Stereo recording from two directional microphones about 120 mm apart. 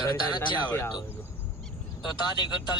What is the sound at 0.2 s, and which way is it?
Speech, 40° left (ahead or behind).